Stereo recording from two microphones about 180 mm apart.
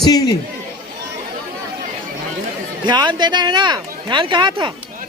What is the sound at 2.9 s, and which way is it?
Speech, 25° right (ahead or behind).